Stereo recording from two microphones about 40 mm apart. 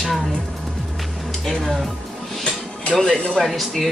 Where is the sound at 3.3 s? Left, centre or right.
Centre.